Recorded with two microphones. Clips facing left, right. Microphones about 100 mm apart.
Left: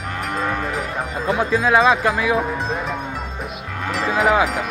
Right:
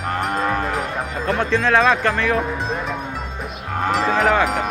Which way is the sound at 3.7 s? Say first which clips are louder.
Right 4 dB; 40° right (ahead or behind).